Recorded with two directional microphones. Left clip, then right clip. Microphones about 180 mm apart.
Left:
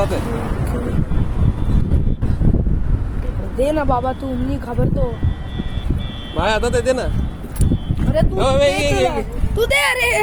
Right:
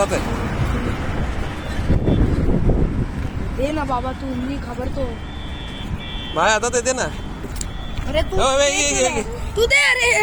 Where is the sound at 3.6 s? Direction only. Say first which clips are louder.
Left 5 dB; 75° left (ahead or behind).